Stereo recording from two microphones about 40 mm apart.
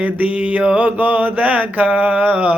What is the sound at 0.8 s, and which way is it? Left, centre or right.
Mantra, right.